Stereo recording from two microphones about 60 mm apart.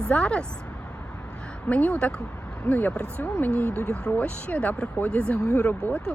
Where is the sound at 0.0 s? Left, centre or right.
Centre.